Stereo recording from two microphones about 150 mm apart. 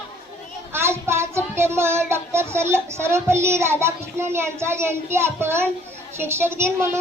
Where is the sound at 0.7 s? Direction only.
15° right (ahead or behind).